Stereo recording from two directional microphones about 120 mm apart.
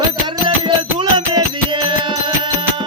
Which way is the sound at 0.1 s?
40° right (ahead or behind).